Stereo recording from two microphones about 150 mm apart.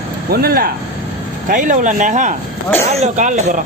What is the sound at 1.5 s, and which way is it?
Speech, 60° right (ahead or behind).